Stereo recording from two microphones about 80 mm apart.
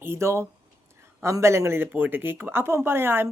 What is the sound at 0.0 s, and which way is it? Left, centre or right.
Speech, right.